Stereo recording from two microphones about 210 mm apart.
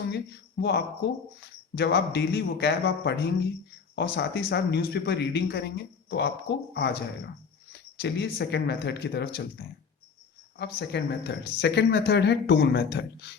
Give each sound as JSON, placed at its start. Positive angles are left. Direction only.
{"t": 0.6, "sound": "speech", "side_deg": 55}
{"t": 10.6, "sound": "speech", "side_deg": 55}